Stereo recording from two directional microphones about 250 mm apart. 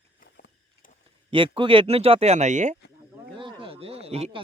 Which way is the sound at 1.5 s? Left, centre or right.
Centre.